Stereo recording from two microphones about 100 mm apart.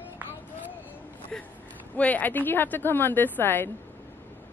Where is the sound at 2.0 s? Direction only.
15° left (ahead or behind).